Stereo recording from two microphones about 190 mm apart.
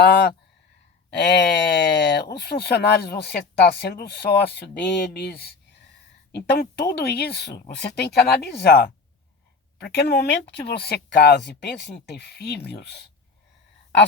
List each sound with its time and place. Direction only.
0.0 s speech: 65° left (ahead or behind)